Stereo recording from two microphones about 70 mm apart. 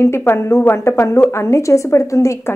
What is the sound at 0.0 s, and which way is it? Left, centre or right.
A woman's voice, left.